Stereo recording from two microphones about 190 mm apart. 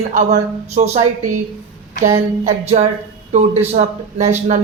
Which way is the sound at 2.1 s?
35° right (ahead or behind).